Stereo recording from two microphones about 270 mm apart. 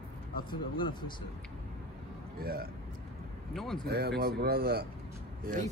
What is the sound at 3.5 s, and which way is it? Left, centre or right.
Speech, centre.